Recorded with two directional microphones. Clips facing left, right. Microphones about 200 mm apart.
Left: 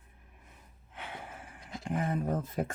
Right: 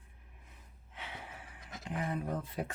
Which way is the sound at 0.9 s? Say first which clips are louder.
Left 3 dB; 50° left (ahead or behind).